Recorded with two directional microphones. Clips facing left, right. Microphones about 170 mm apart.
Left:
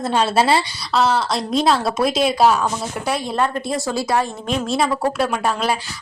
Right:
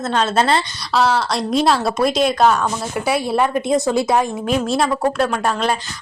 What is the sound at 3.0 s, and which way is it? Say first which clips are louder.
Speech: right 3 dB; 10° right (ahead or behind).